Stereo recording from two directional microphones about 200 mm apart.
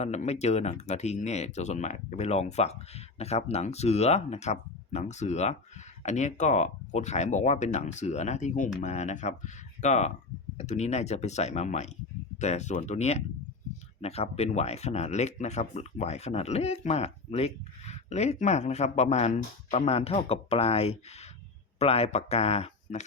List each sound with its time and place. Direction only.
0.0 s speech: 35° left (ahead or behind)